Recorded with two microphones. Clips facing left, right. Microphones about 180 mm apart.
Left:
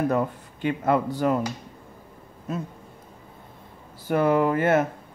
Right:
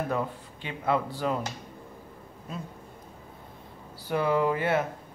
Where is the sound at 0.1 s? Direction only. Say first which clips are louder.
Left 5 dB; 50° left (ahead or behind).